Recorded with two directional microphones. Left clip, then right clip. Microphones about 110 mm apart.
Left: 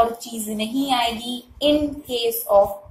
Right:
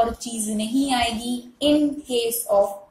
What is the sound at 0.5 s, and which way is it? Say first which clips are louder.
Child singing: left 1 dB; 40° right (ahead or behind).